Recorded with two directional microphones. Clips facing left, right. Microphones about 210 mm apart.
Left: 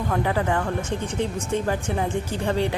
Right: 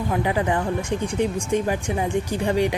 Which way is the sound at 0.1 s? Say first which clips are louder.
Right 1 dB; 15° right (ahead or behind).